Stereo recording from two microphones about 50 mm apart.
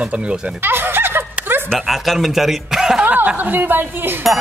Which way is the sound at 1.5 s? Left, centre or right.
Right.